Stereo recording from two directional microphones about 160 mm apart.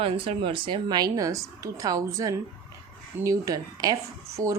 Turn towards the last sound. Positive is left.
turn(degrees=-20)  # may be behind; listen again after turning